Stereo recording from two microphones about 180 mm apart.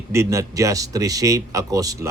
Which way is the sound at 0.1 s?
15° right (ahead or behind).